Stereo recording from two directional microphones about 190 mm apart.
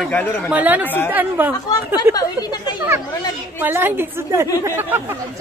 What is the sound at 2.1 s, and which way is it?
Speech, 20° left (ahead or behind).